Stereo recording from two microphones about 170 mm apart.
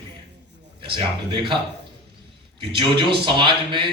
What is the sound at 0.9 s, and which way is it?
Speech, 30° right (ahead or behind).